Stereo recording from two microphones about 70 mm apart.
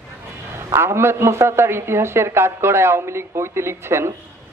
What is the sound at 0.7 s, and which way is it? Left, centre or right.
A man's voice, right.